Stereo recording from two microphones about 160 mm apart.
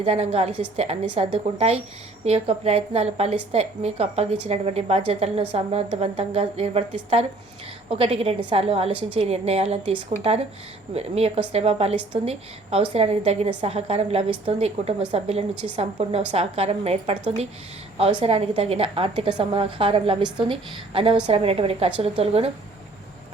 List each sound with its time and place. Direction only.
0.0 s a woman's voice: 40° right (ahead or behind)